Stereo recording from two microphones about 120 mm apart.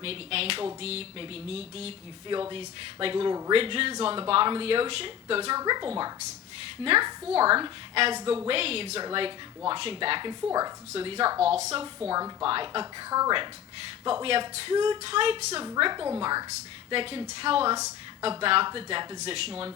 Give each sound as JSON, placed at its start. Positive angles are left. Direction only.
{"t": 0.0, "sound": "speech", "side_deg": -55}
{"t": 5.5, "sound": "a woman's voice", "side_deg": -35}
{"t": 7.5, "sound": "speech", "side_deg": -50}
{"t": 8.1, "sound": "a woman's voice", "side_deg": -40}
{"t": 8.4, "sound": "speech", "side_deg": -55}
{"t": 10.9, "sound": "speech", "side_deg": -50}
{"t": 12.8, "sound": "a woman's voice", "side_deg": -30}
{"t": 14.1, "sound": "speech", "side_deg": -50}
{"t": 15.8, "sound": "a woman's voice", "side_deg": -40}
{"t": 16.9, "sound": "speech", "side_deg": -45}